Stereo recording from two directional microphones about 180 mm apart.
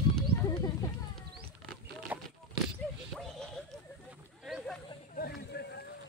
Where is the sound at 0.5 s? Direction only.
20° left (ahead or behind).